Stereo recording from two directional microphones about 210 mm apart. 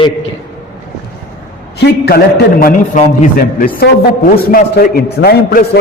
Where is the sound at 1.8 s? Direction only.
50° left (ahead or behind).